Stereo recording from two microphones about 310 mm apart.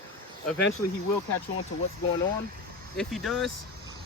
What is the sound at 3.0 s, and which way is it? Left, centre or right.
Speech, centre.